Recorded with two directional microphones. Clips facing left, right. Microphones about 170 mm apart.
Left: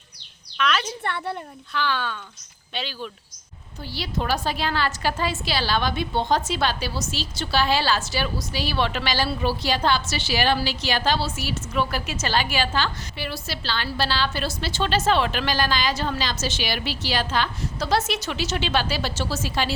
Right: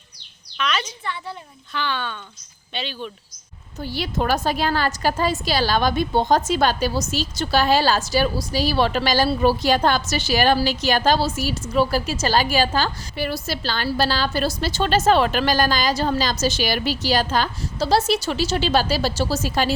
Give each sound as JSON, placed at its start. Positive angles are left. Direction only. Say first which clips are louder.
{"t": 0.5, "sound": "a woman's voice", "louder": "left 1 dB", "side_deg": 0}
{"t": 0.9, "sound": "a woman's voice", "louder": "left 3 dB", "side_deg": 65}
{"t": 1.7, "sound": "speech", "louder": "even", "side_deg": 0}
{"t": 3.8, "sound": "a woman's voice", "louder": "right 4 dB", "side_deg": -50}